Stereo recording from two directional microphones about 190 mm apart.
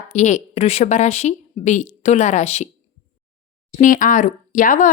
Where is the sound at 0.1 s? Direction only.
40° left (ahead or behind).